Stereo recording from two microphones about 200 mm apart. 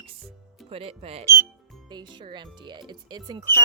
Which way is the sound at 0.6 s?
30° right (ahead or behind).